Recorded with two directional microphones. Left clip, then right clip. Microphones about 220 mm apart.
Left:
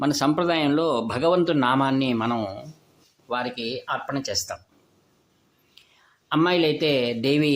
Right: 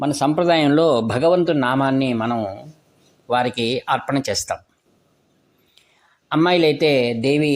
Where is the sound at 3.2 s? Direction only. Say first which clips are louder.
Right 8 dB; 30° right (ahead or behind).